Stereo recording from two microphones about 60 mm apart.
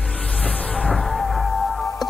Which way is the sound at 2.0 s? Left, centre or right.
Left.